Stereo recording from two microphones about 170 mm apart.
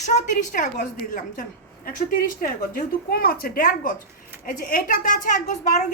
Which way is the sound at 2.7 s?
60° left (ahead or behind).